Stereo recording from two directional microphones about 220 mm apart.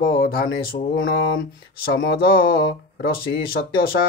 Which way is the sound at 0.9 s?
60° left (ahead or behind).